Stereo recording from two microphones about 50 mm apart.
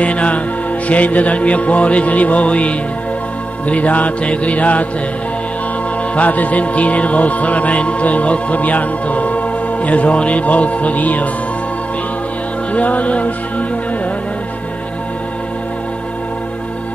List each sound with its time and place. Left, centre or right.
0.0 s music: left
6.1 s music: left
12.7 s music: left